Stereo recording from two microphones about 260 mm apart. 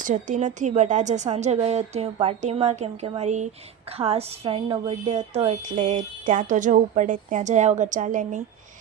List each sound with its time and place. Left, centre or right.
0.0 s a woman's voice: right